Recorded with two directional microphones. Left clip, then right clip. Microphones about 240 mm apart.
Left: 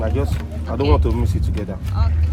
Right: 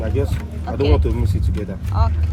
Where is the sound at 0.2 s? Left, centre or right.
Centre.